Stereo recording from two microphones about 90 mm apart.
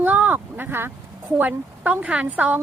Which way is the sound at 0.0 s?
20° right (ahead or behind).